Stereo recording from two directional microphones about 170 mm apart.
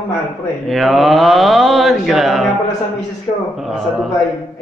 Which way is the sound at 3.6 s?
Centre (ahead or behind).